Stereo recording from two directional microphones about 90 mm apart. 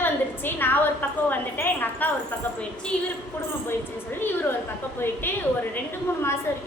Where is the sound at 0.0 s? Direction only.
25° left (ahead or behind).